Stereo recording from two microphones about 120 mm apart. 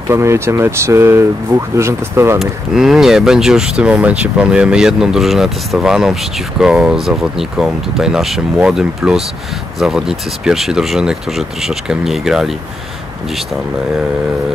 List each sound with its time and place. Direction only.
0.1 s speech: 25° right (ahead or behind)
2.3 s speech: centre (ahead or behind)